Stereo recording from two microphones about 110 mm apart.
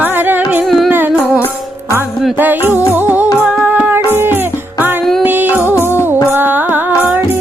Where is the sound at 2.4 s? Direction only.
15° right (ahead or behind).